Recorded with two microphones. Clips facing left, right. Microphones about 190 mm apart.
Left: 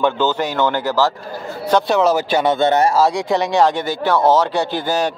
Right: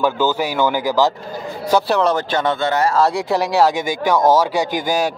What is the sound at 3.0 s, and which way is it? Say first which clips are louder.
Speech: left 1 dB; centre (ahead or behind).